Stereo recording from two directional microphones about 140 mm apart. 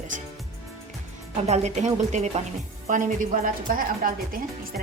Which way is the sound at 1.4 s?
55° right (ahead or behind).